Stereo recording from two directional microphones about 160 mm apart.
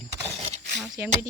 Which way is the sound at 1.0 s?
15° right (ahead or behind).